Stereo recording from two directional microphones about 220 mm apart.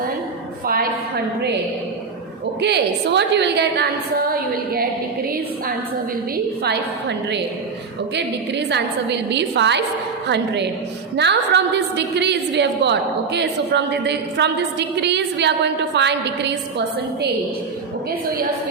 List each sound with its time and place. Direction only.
2.6 s a woman's voice: 50° right (ahead or behind)
6.3 s a woman's voice: 50° right (ahead or behind)